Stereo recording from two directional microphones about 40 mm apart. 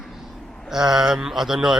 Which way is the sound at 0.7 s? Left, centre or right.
Centre.